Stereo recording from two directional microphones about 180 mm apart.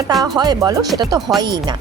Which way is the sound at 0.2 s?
20° right (ahead or behind).